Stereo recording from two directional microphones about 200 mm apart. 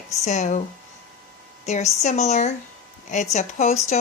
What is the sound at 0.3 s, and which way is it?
Speech, 35° left (ahead or behind).